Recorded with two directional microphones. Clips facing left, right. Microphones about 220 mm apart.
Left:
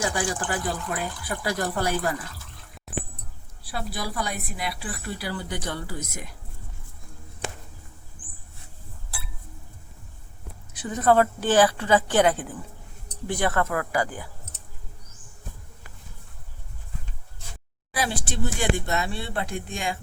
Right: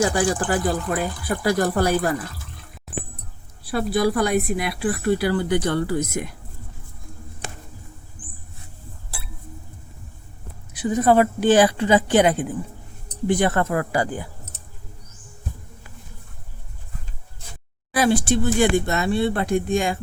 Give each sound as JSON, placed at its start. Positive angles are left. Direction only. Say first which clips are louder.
{"t": 0.0, "sound": "speech", "louder": "right 7 dB", "side_deg": -40}
{"t": 3.7, "sound": "speech", "louder": "right 12 dB", "side_deg": -55}
{"t": 10.8, "sound": "a woman's voice", "louder": "right 3 dB", "side_deg": -10}
{"t": 18.0, "sound": "speech", "louder": "right 10 dB", "side_deg": -50}